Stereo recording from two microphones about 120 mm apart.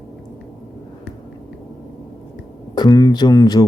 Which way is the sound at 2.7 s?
35° left (ahead or behind).